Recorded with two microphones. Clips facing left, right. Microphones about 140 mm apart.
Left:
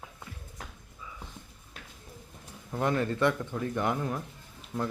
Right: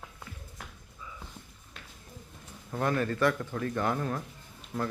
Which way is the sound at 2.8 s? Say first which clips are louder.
Even; 20° left (ahead or behind).